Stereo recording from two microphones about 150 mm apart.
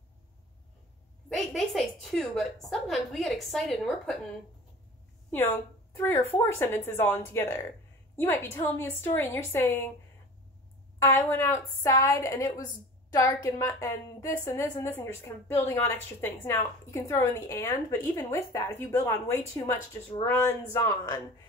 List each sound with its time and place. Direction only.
1.3 s a woman's voice: centre (ahead or behind)
5.3 s a woman's voice: 15° left (ahead or behind)
11.0 s a woman's voice: 15° left (ahead or behind)